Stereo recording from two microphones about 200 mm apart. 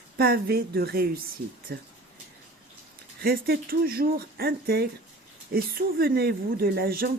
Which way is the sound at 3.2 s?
50° right (ahead or behind).